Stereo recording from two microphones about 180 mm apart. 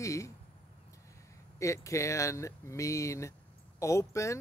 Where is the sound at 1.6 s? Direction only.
15° left (ahead or behind).